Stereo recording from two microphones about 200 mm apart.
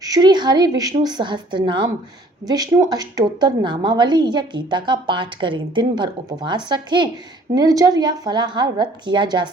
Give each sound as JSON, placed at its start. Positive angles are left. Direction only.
{"t": 0.0, "sound": "a woman's voice", "side_deg": -20}